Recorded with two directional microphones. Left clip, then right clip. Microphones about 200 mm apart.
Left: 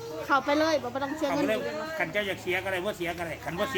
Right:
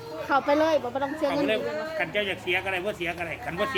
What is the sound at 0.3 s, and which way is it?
Speech, centre (ahead or behind).